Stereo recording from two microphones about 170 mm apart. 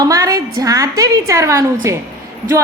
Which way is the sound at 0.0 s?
20° right (ahead or behind).